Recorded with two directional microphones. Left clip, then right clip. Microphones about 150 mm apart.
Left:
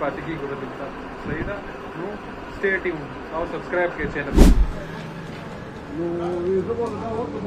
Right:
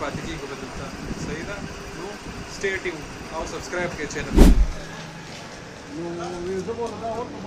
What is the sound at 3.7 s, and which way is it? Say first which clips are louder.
Speech: left 5 dB; 10° right (ahead or behind).